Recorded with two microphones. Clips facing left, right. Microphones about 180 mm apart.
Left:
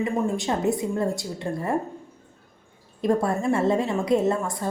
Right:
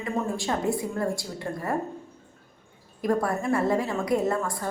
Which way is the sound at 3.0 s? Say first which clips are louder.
Left 3 dB; 25° left (ahead or behind).